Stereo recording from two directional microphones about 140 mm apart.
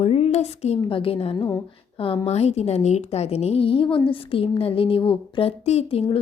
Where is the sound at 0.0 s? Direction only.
45° left (ahead or behind).